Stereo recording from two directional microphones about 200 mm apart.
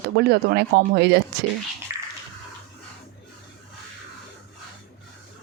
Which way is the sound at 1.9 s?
15° right (ahead or behind).